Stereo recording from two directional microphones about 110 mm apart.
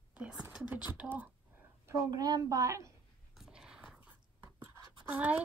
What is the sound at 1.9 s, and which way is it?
Speech, 35° right (ahead or behind).